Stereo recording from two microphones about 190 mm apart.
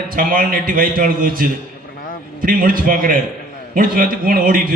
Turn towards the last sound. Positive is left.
turn(degrees=-45)  # may be behind; listen again after turning